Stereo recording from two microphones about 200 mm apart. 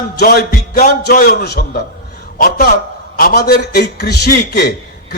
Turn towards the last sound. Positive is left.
turn(degrees=50)  # may be behind; listen again after turning